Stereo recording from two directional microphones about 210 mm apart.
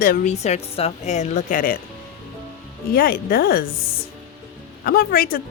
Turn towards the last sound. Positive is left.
turn(degrees=45)  # may be behind; listen again after turning